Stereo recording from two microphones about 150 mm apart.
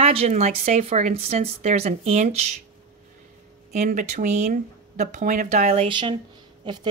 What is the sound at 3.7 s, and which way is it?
A woman's voice, 55° right (ahead or behind).